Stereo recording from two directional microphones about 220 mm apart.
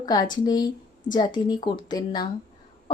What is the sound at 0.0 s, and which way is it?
Speech, 20° left (ahead or behind).